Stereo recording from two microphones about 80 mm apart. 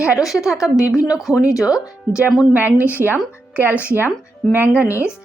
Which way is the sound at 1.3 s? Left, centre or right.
Left.